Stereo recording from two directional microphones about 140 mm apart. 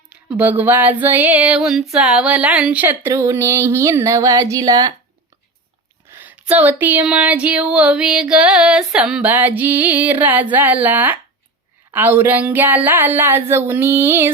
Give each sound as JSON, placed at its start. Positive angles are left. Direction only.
{"t": 0.1, "sound": "speech", "side_deg": -10}
{"t": 6.1, "sound": "speech", "side_deg": -15}